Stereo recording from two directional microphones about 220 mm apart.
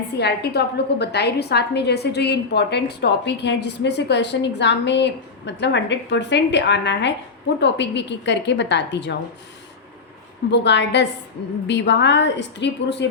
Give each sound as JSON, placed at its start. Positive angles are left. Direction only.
{"t": 0.2, "sound": "a woman's voice", "side_deg": 50}
{"t": 10.5, "sound": "a woman's voice", "side_deg": 55}